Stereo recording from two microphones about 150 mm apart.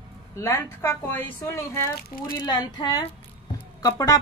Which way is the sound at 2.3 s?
30° left (ahead or behind).